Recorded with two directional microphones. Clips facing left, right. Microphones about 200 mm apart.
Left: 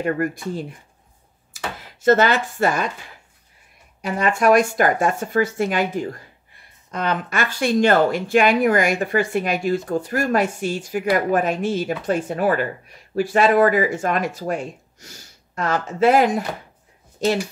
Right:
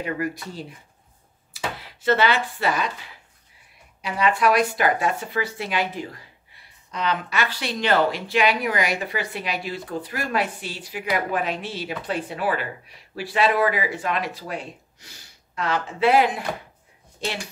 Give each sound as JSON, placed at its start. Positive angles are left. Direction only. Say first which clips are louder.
{"t": 0.0, "sound": "speech", "louder": "left 5 dB", "side_deg": 50}
{"t": 4.0, "sound": "speech", "louder": "left 2 dB", "side_deg": 45}